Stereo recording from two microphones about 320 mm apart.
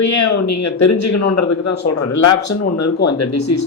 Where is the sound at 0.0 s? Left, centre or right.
Left.